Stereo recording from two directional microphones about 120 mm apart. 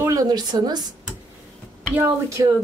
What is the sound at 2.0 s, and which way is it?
Speech, 25° right (ahead or behind).